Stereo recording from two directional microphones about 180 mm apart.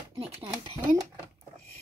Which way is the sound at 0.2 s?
25° right (ahead or behind).